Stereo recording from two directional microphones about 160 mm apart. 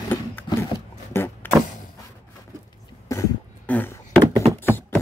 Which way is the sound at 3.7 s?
15° left (ahead or behind).